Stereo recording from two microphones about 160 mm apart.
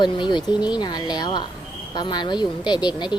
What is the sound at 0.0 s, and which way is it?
Speech, 30° left (ahead or behind).